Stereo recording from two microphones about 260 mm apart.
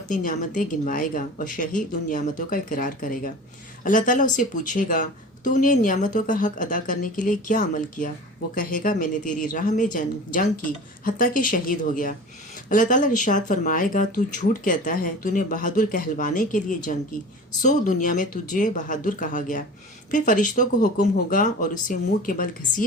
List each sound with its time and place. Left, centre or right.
0.1 s speech: left